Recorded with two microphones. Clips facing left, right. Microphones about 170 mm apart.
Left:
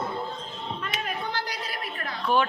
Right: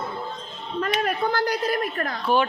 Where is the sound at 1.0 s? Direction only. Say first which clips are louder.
Right 8 dB; 45° right (ahead or behind).